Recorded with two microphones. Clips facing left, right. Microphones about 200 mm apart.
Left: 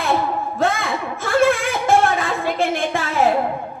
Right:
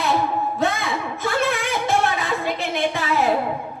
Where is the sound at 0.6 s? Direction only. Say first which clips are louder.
Left 5 dB; 50° left (ahead or behind).